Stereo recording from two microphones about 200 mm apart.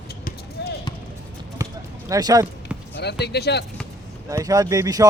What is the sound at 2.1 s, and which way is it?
Speech, 20° right (ahead or behind).